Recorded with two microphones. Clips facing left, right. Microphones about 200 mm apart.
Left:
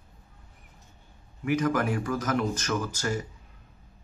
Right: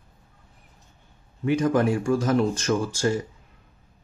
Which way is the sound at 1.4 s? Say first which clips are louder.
Right 5 dB; 25° right (ahead or behind).